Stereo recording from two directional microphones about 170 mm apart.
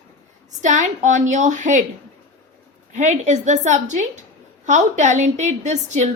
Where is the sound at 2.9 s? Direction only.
45° right (ahead or behind).